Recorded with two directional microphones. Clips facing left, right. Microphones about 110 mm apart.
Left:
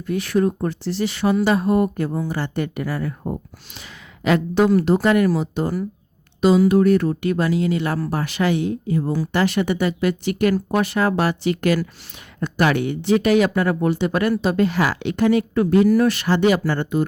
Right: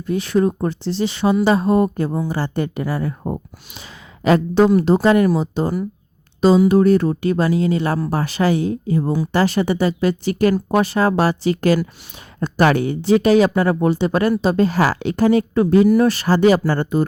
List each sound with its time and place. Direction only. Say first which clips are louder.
0.0 s speech: right 2 dB; 25° right (ahead or behind)